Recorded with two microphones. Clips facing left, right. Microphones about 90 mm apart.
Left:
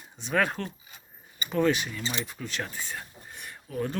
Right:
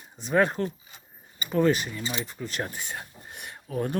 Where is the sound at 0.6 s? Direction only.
30° right (ahead or behind).